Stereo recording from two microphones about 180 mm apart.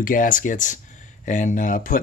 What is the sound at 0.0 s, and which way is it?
Speech, 50° left (ahead or behind).